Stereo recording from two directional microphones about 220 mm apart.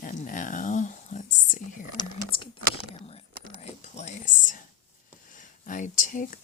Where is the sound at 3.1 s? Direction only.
30° left (ahead or behind).